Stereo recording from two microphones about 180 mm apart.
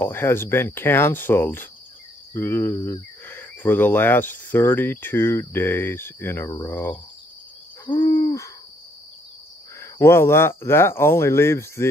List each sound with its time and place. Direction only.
0.0 s speech: 10° left (ahead or behind)
7.8 s hoot: 25° left (ahead or behind)
9.8 s speech: 15° left (ahead or behind)